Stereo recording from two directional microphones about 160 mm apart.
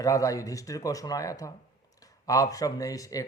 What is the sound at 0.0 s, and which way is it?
Speech, 20° left (ahead or behind).